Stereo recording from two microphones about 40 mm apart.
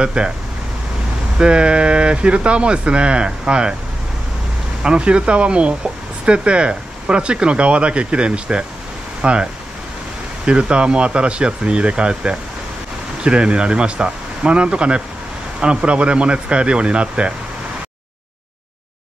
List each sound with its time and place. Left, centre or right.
0.0 s speech: right
1.4 s speech: right
4.8 s speech: right